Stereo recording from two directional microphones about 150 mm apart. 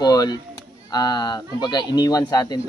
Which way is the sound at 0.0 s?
25° left (ahead or behind).